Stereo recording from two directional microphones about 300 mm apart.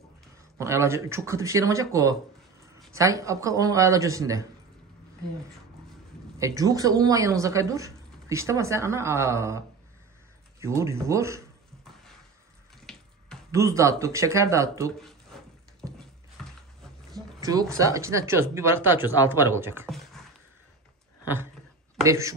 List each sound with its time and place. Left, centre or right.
0.6 s speech: centre
6.3 s speech: centre
12.9 s water tap: centre
13.5 s speech: centre
17.1 s speech: centre
22.0 s speech: centre